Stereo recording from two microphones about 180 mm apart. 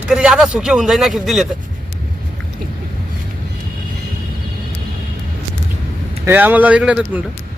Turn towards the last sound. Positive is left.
turn(degrees=-5)  # may be behind; listen again after turning